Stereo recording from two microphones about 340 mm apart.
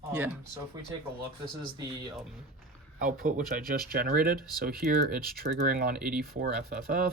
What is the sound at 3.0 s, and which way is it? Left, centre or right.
Speech, right.